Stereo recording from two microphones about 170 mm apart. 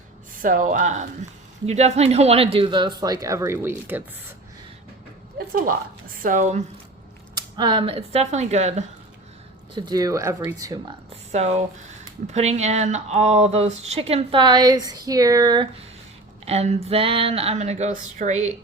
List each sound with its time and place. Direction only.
0.3 s speech: 50° right (ahead or behind); by 4.0 s 10° right (ahead or behind)
6.2 s speech: 50° right (ahead or behind)
7.3 s speech: 25° right (ahead or behind); by 8.8 s 40° right (ahead or behind)
9.7 s speech: 25° right (ahead or behind)
11.1 s speech: 40° right (ahead or behind); by 15.6 s 25° right (ahead or behind)
16.5 s speech: 40° right (ahead or behind)